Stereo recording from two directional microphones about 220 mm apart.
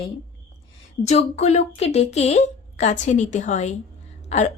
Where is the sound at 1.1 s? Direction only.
30° left (ahead or behind).